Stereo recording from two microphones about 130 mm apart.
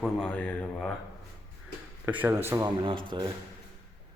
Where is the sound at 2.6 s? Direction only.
40° right (ahead or behind).